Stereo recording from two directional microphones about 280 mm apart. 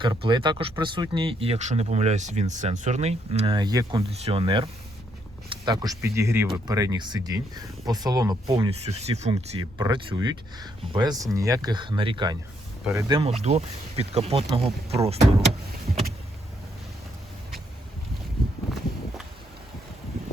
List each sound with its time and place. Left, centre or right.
0.0 s speech: centre